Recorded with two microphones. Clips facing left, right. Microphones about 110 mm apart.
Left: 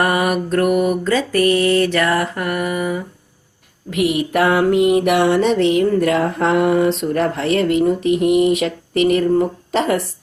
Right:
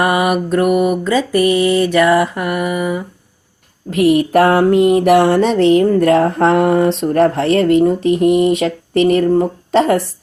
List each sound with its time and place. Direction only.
0.0 s mantra: 10° right (ahead or behind)
3.8 s music: 35° right (ahead or behind)